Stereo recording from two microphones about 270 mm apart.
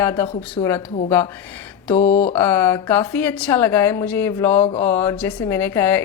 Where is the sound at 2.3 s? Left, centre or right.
Centre.